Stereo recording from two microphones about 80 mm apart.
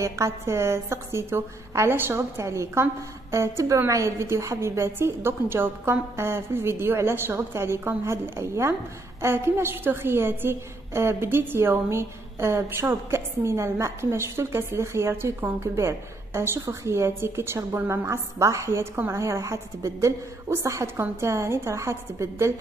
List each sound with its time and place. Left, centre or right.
0.0 s a woman's voice: right